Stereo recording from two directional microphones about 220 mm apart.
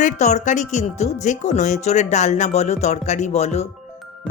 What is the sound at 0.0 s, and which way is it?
Speech, 30° left (ahead or behind).